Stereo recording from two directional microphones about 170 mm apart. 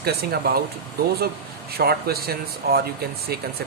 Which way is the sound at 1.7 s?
65° right (ahead or behind).